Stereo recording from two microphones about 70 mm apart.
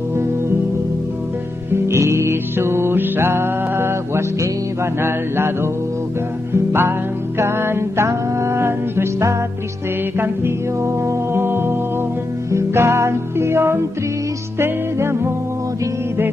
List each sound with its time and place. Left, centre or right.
1.7 s music: right
5.0 s mantra: right
6.5 s music: right
10.1 s music: right